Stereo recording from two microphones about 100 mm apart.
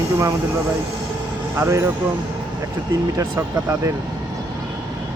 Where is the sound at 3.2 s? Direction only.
30° right (ahead or behind).